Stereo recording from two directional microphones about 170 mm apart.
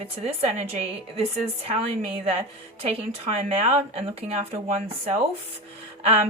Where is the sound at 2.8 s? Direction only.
35° right (ahead or behind).